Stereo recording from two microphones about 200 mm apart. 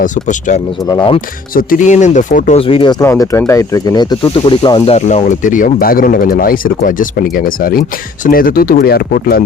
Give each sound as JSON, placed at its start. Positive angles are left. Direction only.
{"t": 0.0, "sound": "speech", "side_deg": 40}
{"t": 0.9, "sound": "speech", "side_deg": 25}
{"t": 1.5, "sound": "speech", "side_deg": 40}
{"t": 4.9, "sound": "speech", "side_deg": 35}